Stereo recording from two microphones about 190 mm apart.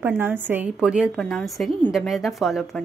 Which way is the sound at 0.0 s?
10° right (ahead or behind).